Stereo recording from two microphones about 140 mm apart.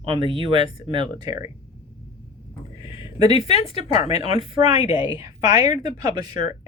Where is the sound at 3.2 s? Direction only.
45° left (ahead or behind).